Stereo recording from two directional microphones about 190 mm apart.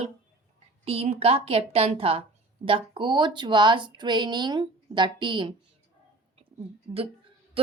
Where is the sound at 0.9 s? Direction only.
35° right (ahead or behind).